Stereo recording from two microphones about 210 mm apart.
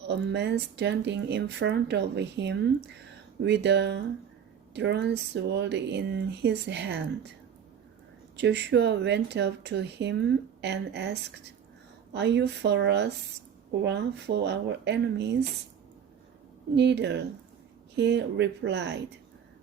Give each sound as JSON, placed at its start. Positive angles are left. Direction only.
{"t": 0.1, "sound": "speech", "side_deg": -55}
{"t": 8.4, "sound": "speech", "side_deg": -55}
{"t": 16.7, "sound": "speech", "side_deg": -55}